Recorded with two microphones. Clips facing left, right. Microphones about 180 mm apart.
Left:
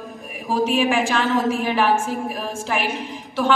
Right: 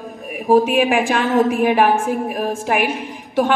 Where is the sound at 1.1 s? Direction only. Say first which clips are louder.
Right 4 dB; 50° right (ahead or behind).